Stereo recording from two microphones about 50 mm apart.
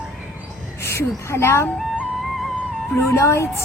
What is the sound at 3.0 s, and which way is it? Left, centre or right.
Speech, left.